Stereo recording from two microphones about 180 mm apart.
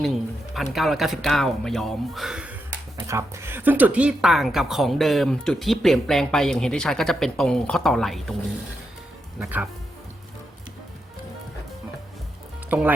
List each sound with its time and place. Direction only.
0.0 s speech: centre (ahead or behind)
3.1 s speech: 15° right (ahead or behind); by 8.4 s centre (ahead or behind)
9.4 s speech: 5° right (ahead or behind)
12.7 s speech: 10° right (ahead or behind)